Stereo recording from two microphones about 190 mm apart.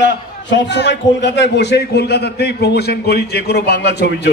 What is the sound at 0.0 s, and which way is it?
A man's voice, 65° left (ahead or behind).